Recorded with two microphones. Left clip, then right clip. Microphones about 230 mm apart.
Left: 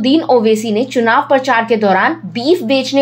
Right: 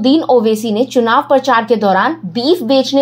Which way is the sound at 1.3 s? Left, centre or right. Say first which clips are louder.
Right 1 dB; centre.